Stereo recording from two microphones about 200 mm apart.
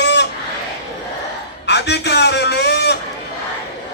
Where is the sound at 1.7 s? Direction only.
55° left (ahead or behind).